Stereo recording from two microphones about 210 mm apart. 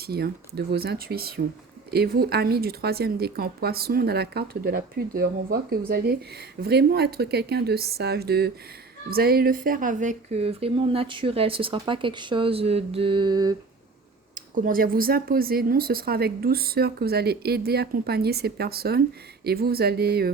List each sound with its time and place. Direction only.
0.0 s speech: 50° right (ahead or behind); by 13.6 s 20° right (ahead or behind)
14.3 s speech: 40° right (ahead or behind)